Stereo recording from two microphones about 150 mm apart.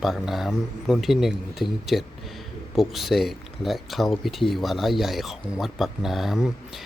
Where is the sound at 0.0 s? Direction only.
Centre (ahead or behind).